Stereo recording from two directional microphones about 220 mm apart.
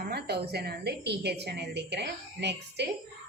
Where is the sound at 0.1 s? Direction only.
45° right (ahead or behind).